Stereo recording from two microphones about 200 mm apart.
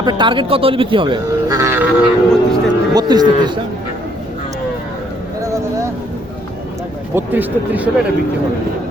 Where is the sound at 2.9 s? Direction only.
20° right (ahead or behind).